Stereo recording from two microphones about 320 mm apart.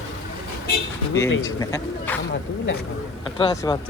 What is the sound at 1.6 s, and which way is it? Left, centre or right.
Speech, centre.